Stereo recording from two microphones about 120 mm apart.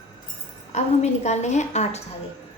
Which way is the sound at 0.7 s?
70° left (ahead or behind).